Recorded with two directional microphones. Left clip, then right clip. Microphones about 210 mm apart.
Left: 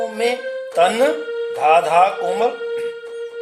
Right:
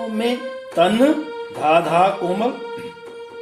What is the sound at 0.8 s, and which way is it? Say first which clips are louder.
Speech: left 1 dB; 45° left (ahead or behind).